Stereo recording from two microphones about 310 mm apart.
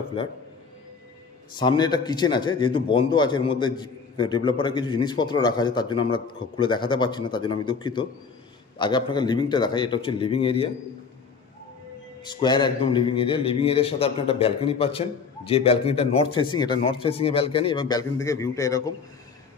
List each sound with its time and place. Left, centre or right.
1.6 s a man's voice: centre
12.3 s a man's voice: centre